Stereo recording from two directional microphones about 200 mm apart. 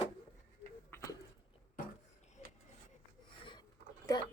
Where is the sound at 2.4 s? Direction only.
35° left (ahead or behind).